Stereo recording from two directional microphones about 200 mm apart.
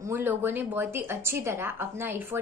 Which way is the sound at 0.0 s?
10° right (ahead or behind).